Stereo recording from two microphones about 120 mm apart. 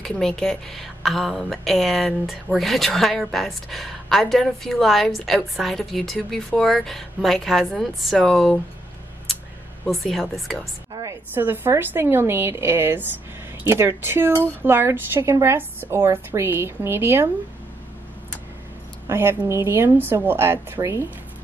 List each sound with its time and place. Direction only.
0.0 s a woman's voice: 5° left (ahead or behind)
9.8 s a woman's voice: centre (ahead or behind)
10.9 s a sound: 35° right (ahead or behind)
11.3 s a woman's voice: 15° right (ahead or behind)
19.0 s a woman's voice: 20° right (ahead or behind)